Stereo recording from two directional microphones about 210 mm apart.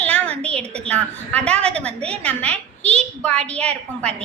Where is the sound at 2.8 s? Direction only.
30° right (ahead or behind).